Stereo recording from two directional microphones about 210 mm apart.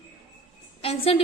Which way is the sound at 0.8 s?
25° left (ahead or behind).